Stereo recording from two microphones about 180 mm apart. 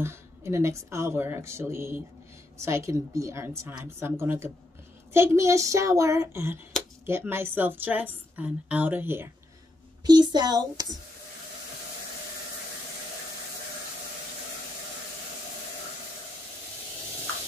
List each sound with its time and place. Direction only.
0.0 s a woman's voice: 15° right (ahead or behind)
10.0 s speech: 25° right (ahead or behind)